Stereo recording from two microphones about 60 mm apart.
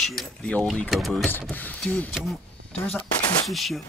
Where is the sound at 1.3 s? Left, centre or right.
Left.